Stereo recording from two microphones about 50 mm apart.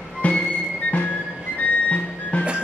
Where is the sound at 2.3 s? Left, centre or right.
Left.